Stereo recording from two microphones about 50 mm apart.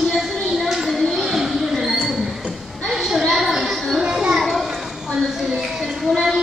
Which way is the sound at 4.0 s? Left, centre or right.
Centre.